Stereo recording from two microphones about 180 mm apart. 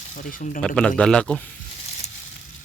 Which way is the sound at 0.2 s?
50° left (ahead or behind).